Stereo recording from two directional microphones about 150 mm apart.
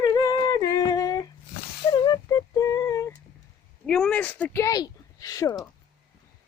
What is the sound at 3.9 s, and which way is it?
Speech, 5° left (ahead or behind).